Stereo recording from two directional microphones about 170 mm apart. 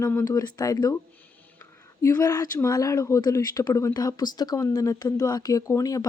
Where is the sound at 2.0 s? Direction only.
20° left (ahead or behind).